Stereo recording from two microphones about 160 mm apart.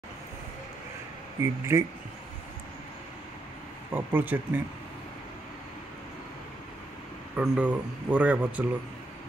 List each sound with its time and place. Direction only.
1.4 s speech: 20° right (ahead or behind)
3.9 s speech: 10° right (ahead or behind)
7.3 s speech: 10° right (ahead or behind)